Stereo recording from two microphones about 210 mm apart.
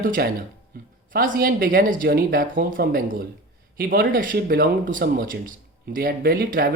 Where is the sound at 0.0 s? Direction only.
40° right (ahead or behind).